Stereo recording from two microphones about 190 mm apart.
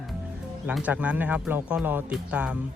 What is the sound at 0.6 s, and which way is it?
Speech, 5° right (ahead or behind).